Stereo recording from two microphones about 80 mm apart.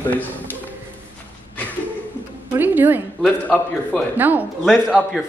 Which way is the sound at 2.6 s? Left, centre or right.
Right.